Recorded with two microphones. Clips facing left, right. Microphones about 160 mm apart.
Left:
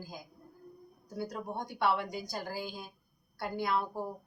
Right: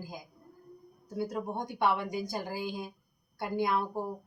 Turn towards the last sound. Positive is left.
turn(degrees=-20)  # may be behind; listen again after turning